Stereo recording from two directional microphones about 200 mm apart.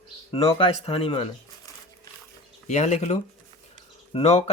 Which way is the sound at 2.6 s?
35° left (ahead or behind).